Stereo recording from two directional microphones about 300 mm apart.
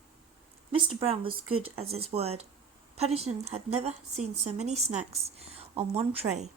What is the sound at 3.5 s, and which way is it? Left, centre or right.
A woman's voice, right.